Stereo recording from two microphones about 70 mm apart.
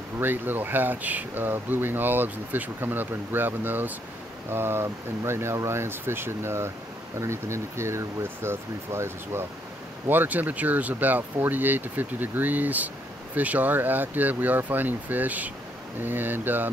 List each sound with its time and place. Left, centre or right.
0.2 s speech: right
10.0 s speech: right